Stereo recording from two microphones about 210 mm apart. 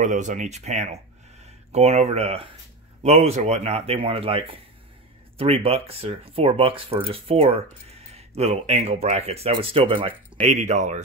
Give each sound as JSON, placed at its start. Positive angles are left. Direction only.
{"t": 0.0, "sound": "speech", "side_deg": -35}